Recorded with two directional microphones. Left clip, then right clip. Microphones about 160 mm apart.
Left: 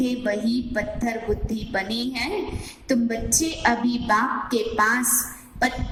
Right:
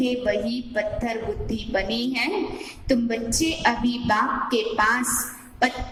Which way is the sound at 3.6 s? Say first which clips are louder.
Left 1 dB; 50° left (ahead or behind).